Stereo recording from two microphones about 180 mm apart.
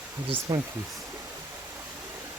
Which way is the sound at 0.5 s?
20° right (ahead or behind).